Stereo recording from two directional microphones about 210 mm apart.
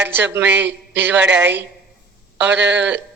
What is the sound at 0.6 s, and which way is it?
Speech, 55° right (ahead or behind).